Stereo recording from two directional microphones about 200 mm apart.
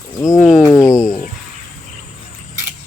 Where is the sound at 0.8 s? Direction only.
15° left (ahead or behind).